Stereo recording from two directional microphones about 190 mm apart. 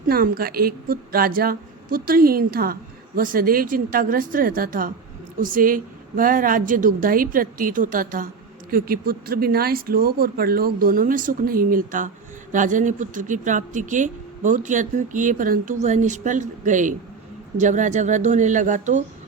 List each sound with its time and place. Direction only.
0.1 s a woman's voice: 50° right (ahead or behind)